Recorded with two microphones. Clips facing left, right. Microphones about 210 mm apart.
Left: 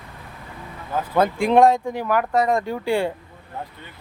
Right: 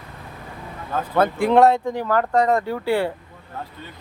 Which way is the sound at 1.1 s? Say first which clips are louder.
Even; 15° left (ahead or behind).